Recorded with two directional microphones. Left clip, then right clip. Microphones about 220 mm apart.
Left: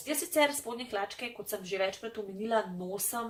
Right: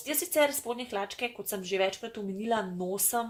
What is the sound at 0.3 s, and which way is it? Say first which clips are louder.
Speech: right 2 dB; 45° right (ahead or behind).